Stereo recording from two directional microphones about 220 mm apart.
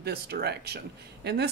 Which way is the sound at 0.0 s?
45° right (ahead or behind).